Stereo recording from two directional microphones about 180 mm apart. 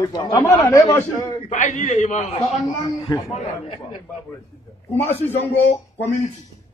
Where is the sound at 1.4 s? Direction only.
45° left (ahead or behind).